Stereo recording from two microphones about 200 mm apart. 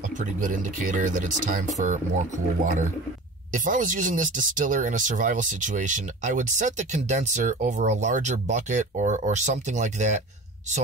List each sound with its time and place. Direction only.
0.2 s speech: 40° right (ahead or behind)